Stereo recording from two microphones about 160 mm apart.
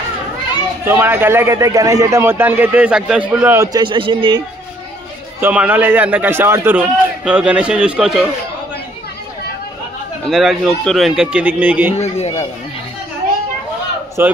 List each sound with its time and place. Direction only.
0.8 s a man's voice: 15° right (ahead or behind)
3.5 s a man's voice: 20° right (ahead or behind)
5.4 s a man's voice: 10° right (ahead or behind)
10.2 s a man's voice: centre (ahead or behind)
12.0 s speech: 40° left (ahead or behind)
14.2 s a man's voice: 15° right (ahead or behind)